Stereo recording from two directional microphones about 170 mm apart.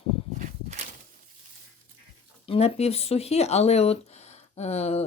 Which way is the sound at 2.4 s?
35° left (ahead or behind).